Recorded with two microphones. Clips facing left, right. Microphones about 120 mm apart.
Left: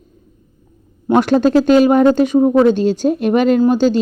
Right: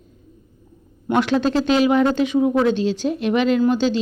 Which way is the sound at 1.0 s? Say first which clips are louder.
Left 6 dB; 45° left (ahead or behind).